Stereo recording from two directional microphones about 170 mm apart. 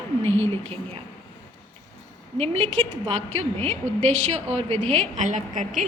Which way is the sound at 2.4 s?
40° right (ahead or behind).